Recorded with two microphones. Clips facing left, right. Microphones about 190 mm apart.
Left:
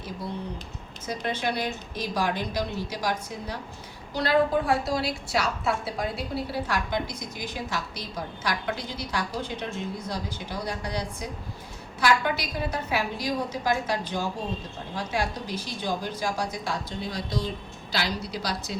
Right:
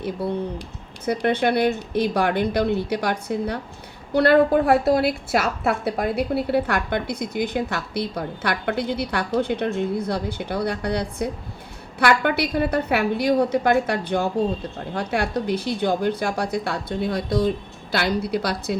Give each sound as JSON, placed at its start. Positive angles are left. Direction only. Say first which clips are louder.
{"t": 1.0, "sound": "a woman's voice", "louder": "right 9 dB", "side_deg": -60}